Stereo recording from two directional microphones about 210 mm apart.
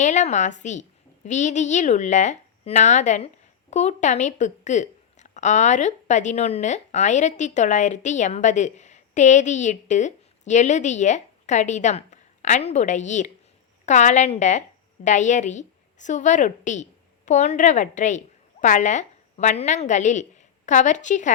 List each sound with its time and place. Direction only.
0.0 s a woman's voice: 35° left (ahead or behind)